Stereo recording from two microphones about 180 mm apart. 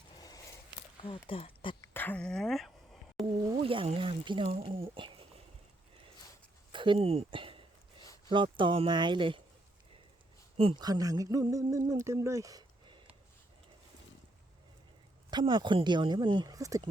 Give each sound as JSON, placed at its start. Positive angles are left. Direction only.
{"t": 0.2, "sound": "a sound", "side_deg": 20}
{"t": 1.0, "sound": "speech", "side_deg": 30}
{"t": 1.8, "sound": "busy signal", "side_deg": 10}
{"t": 3.4, "sound": "speech", "side_deg": -25}
{"t": 6.7, "sound": "a sound", "side_deg": -25}
{"t": 8.3, "sound": "speech", "side_deg": -25}
{"t": 10.6, "sound": "speech", "side_deg": -25}
{"t": 15.3, "sound": "speech", "side_deg": -25}